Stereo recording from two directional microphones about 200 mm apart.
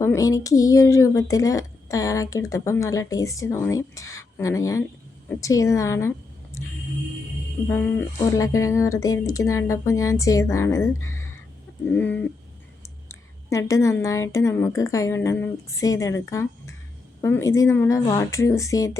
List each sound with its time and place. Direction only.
0.0 s a woman's voice: 15° left (ahead or behind)
7.7 s a woman's voice: 10° left (ahead or behind)